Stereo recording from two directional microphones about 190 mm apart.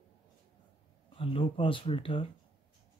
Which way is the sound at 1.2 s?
30° left (ahead or behind).